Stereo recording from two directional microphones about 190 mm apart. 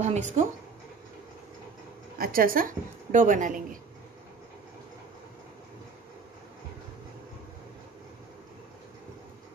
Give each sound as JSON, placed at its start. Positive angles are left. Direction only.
{"t": 0.0, "sound": "speech", "side_deg": -35}
{"t": 2.1, "sound": "a woman's voice", "side_deg": -50}